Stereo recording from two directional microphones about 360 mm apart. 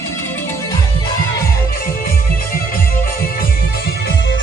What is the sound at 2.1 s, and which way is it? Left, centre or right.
Music, left.